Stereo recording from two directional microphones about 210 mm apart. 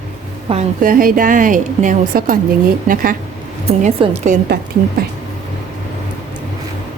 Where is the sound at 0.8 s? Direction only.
40° right (ahead or behind).